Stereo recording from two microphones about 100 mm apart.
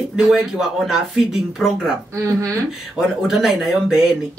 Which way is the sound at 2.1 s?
30° right (ahead or behind).